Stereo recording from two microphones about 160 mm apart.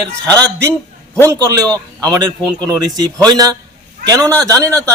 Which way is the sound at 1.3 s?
20° right (ahead or behind).